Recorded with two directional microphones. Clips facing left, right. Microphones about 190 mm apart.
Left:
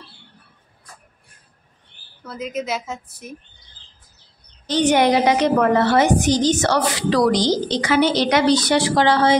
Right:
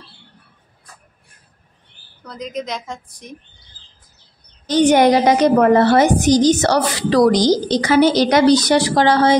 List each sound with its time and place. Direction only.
2.2 s a woman's voice: 5° left (ahead or behind)
4.6 s a woman's voice: 45° right (ahead or behind)